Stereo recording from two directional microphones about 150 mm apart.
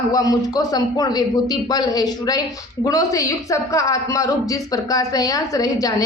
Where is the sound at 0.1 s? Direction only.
25° left (ahead or behind).